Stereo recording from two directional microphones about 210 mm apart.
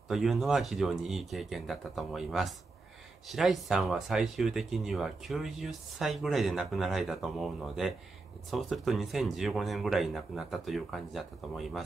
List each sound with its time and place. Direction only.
0.1 s speech: centre (ahead or behind)